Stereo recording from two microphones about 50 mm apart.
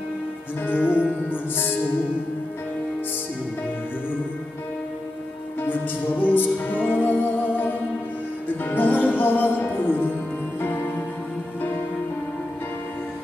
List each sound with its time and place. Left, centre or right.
0.7 s music: left
5.6 s music: left